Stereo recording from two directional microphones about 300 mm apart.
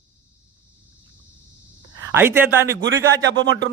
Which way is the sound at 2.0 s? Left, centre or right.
Centre.